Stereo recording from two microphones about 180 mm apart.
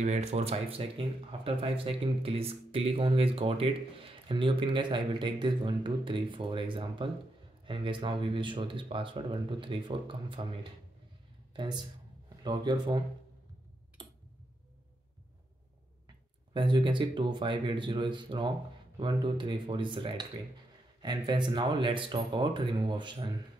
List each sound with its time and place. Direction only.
0.0 s speech: 40° right (ahead or behind)
11.5 s speech: 25° right (ahead or behind)
14.0 s tick-tock: 25° right (ahead or behind)
16.5 s speech: 25° right (ahead or behind)